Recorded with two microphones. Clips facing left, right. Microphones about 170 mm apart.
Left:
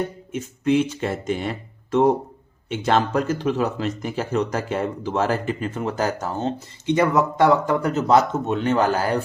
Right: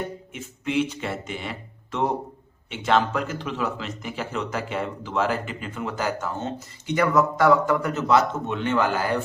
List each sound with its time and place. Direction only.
0.3 s speech: 45° left (ahead or behind)
6.8 s speech: 25° left (ahead or behind)